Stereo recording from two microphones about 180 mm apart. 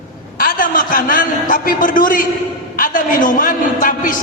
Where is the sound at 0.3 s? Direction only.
50° left (ahead or behind).